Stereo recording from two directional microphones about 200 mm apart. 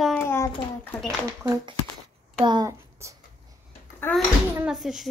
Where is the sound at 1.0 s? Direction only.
20° right (ahead or behind).